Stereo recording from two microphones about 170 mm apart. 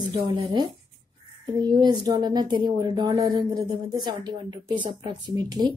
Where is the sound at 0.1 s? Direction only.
25° right (ahead or behind).